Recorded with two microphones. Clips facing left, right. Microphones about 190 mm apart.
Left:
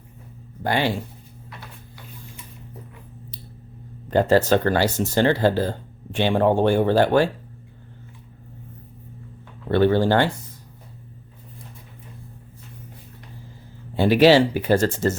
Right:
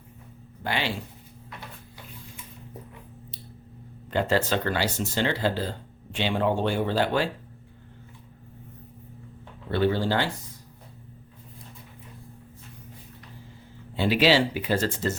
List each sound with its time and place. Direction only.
0.6 s speech: 45° left (ahead or behind)
4.1 s speech: 40° left (ahead or behind)
9.6 s speech: 55° left (ahead or behind)
13.9 s speech: 45° left (ahead or behind)